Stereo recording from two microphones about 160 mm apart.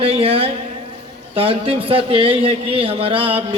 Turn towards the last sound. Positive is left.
turn(degrees=-35)  # may be behind; listen again after turning